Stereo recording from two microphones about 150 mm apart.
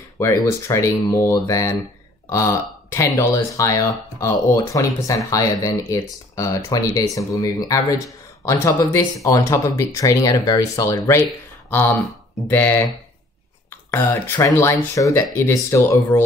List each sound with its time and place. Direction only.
0.2 s speech: 20° left (ahead or behind)
12.4 s speech: 15° left (ahead or behind)